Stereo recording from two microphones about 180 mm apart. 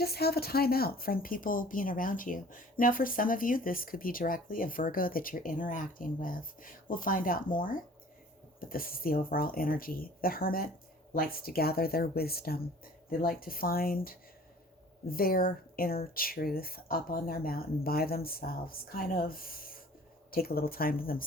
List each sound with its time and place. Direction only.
0.0 s speech: 60° left (ahead or behind)